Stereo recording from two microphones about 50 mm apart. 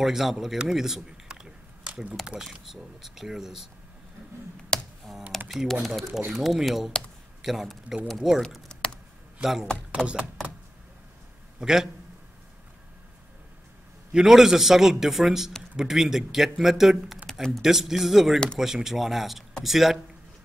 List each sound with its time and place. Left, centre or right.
0.0 s speech: centre
0.7 s a sound: centre
2.6 s speech: centre
4.7 s computer keyboard: centre
5.5 s speech: centre
6.1 s speech: centre
8.6 s computer keyboard: centre
9.4 s speech: centre
11.6 s speech: centre
14.1 s speech: centre
17.3 s a sound: centre
17.6 s speech: centre